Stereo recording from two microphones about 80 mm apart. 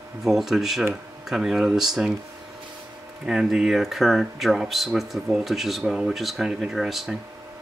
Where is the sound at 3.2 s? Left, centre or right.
Centre.